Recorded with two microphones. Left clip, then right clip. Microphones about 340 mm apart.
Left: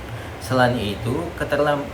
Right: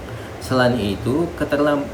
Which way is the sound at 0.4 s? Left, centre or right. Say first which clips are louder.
Right 1 dB; centre.